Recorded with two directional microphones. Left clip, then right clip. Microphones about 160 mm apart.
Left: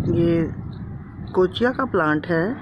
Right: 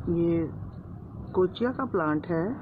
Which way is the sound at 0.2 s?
90° left.